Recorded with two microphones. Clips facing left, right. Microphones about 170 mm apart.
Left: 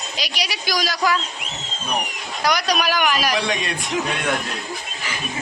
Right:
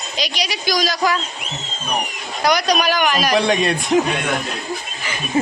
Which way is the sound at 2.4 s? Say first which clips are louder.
Right 4 dB; centre (ahead or behind).